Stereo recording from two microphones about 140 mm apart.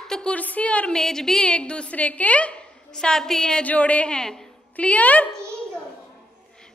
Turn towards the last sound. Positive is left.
turn(degrees=10)  # may be behind; listen again after turning